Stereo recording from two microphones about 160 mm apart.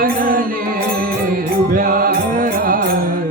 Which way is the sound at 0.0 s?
60° right (ahead or behind).